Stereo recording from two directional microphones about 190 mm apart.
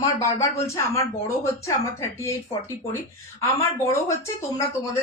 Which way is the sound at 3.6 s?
15° left (ahead or behind).